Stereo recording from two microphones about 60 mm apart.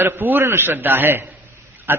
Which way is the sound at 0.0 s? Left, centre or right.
Right.